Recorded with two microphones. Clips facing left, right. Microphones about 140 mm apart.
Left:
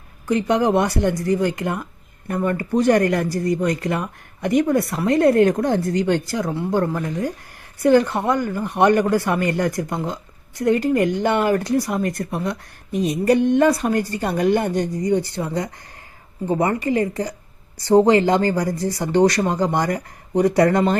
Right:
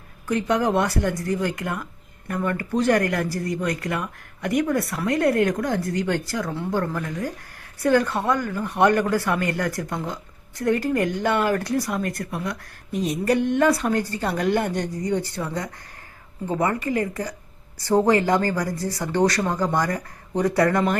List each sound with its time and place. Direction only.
0.3 s speech: 20° left (ahead or behind)